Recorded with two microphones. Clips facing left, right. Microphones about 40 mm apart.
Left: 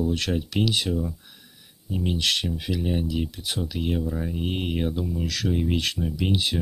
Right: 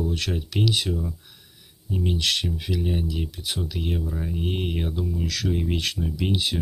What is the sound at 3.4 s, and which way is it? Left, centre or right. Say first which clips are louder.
Speech: even; centre.